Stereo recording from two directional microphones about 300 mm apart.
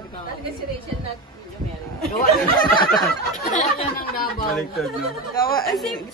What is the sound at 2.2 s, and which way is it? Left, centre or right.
Speech, left.